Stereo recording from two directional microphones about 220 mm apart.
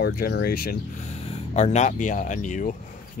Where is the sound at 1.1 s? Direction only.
30° left (ahead or behind).